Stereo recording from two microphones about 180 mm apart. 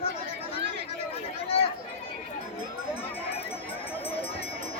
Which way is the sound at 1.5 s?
35° left (ahead or behind).